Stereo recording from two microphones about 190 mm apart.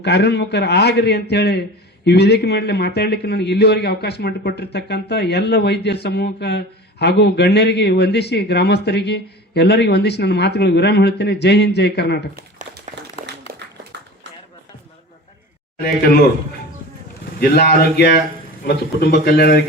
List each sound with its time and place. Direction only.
0.0 s a man's voice: 60° left (ahead or behind)
12.4 s crumpling: 55° right (ahead or behind)
13.5 s a sound: 50° right (ahead or behind)
17.4 s a man's voice: 55° left (ahead or behind)